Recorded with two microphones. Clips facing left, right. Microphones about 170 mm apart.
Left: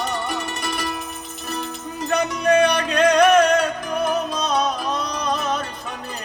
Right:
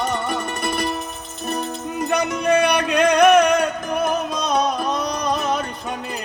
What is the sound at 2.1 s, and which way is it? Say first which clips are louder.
Music: left 1 dB; 15° right (ahead or behind).